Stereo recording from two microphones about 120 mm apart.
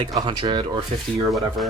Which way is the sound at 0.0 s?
40° right (ahead or behind).